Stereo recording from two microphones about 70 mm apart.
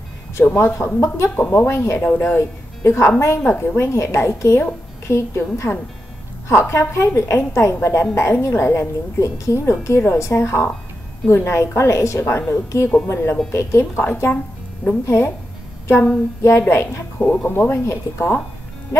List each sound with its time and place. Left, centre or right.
0.4 s speech: left
2.0 s speech: left
16.4 s speech: left
17.2 s speech: left